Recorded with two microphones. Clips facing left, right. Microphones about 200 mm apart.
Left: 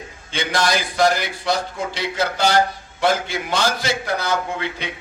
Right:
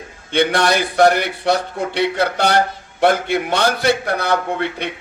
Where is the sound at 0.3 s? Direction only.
60° right (ahead or behind).